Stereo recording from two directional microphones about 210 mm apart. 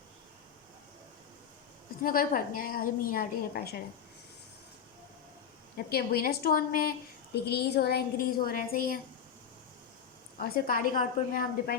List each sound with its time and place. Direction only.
2.0 s a woman's voice: 40° left (ahead or behind)
5.7 s a woman's voice: 45° left (ahead or behind)
10.3 s a woman's voice: 45° left (ahead or behind)